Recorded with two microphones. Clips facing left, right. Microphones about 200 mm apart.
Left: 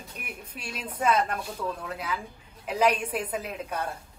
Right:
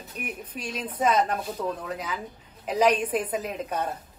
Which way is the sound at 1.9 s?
10° left (ahead or behind).